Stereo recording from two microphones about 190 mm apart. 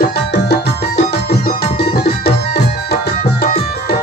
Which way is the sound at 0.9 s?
55° left (ahead or behind).